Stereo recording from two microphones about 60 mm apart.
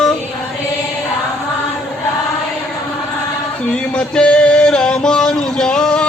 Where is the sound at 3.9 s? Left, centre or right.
Centre.